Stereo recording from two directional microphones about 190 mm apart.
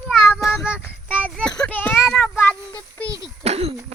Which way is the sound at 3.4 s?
35° right (ahead or behind).